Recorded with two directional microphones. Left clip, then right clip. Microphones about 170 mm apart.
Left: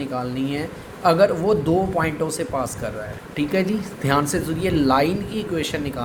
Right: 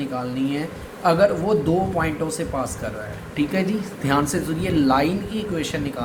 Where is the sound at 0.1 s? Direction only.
55° left (ahead or behind).